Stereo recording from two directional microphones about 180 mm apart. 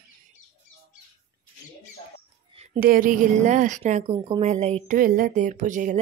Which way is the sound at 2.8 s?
50° right (ahead or behind).